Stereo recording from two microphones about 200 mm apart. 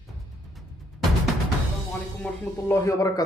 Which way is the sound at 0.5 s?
Centre (ahead or behind).